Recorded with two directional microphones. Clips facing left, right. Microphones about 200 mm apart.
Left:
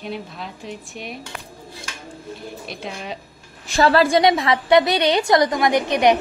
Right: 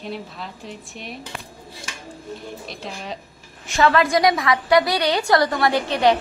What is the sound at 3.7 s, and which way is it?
A woman's voice, 35° left (ahead or behind).